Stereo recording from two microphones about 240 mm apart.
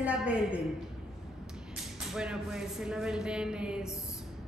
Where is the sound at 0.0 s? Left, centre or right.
Centre.